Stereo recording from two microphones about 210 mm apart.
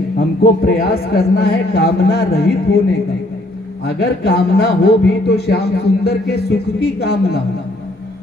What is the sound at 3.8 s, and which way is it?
Speech, 50° left (ahead or behind).